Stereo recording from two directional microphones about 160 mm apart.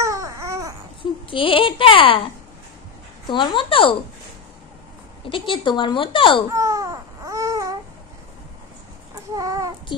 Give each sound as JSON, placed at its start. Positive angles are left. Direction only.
{"t": 0.0, "sound": "a sound", "side_deg": -20}
{"t": 1.3, "sound": "a woman's voice", "side_deg": 35}
{"t": 5.2, "sound": "a woman's voice", "side_deg": 35}
{"t": 6.5, "sound": "baby cry", "side_deg": -20}
{"t": 9.3, "sound": "child singing", "side_deg": -20}